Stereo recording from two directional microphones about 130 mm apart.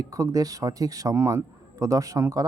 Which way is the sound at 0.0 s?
25° right (ahead or behind).